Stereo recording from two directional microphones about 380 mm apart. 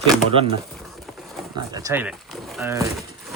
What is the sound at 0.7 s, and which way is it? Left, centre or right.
Horse, centre.